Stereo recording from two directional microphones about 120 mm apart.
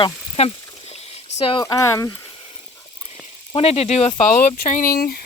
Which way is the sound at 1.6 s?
25° left (ahead or behind).